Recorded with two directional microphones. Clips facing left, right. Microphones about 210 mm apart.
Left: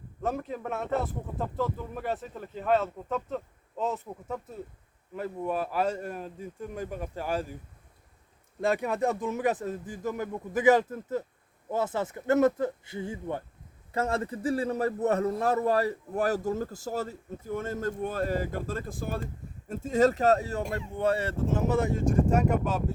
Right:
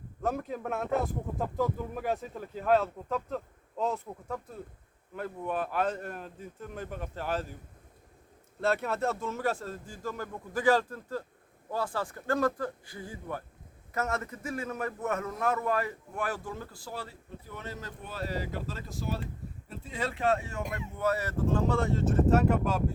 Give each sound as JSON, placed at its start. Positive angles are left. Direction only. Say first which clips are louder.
{"t": 0.2, "sound": "speech", "louder": "left 1 dB", "side_deg": 0}
{"t": 1.5, "sound": "speech", "louder": "right 1 dB", "side_deg": -15}
{"t": 2.0, "sound": "speech", "louder": "even", "side_deg": 0}
{"t": 8.6, "sound": "a man's voice", "louder": "left 2 dB", "side_deg": 15}